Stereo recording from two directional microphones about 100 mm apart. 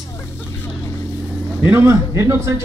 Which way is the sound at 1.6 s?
25° right (ahead or behind).